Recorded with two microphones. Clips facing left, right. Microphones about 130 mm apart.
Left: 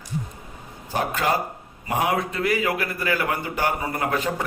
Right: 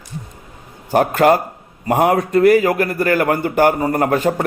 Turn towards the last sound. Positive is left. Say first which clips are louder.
# right 8 dB
turn(degrees=-50)  # may be behind; listen again after turning